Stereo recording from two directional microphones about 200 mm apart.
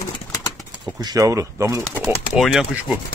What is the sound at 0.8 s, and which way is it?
A man's voice, 20° right (ahead or behind).